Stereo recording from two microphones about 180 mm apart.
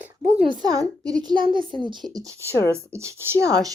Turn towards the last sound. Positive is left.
turn(degrees=-15)  # may be behind; listen again after turning